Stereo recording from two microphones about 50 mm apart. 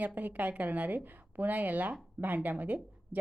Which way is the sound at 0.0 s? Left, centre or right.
Right.